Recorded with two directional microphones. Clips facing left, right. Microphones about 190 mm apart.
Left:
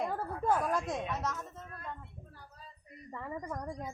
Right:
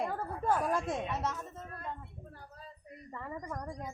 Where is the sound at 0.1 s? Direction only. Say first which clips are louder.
Left 1 dB; 10° left (ahead or behind).